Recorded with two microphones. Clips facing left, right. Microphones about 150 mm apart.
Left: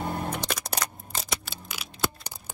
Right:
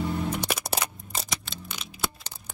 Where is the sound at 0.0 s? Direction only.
50° left (ahead or behind).